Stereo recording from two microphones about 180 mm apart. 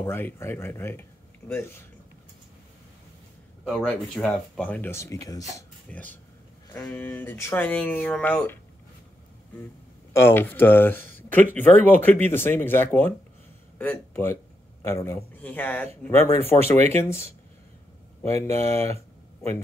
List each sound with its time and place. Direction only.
0.0 s speech: 15° left (ahead or behind)
3.6 s speech: 5° left (ahead or behind)
10.1 s a man's voice: 10° left (ahead or behind)
16.7 s speech: 40° right (ahead or behind)
17.0 s speech: 15° left (ahead or behind)
18.2 s speech: 35° right (ahead or behind)